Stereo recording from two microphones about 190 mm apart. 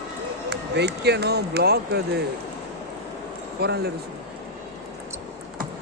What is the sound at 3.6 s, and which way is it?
Speech, 60° right (ahead or behind).